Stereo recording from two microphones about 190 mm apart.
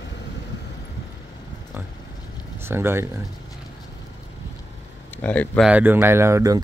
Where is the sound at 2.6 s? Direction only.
15° right (ahead or behind).